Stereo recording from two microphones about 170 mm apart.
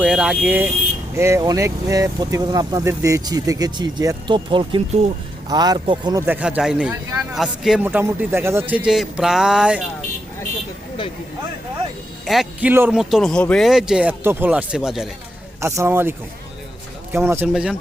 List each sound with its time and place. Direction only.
0.0 s a man's voice: 5° right (ahead or behind); by 6.2 s 25° right (ahead or behind)
6.2 s a man's voice: 10° right (ahead or behind)
12.2 s speech: centre (ahead or behind)
15.6 s a man's voice: 15° right (ahead or behind)
17.5 s speech: 5° right (ahead or behind)